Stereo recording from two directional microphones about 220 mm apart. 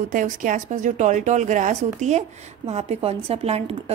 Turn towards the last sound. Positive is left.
turn(degrees=-25)  # may be behind; listen again after turning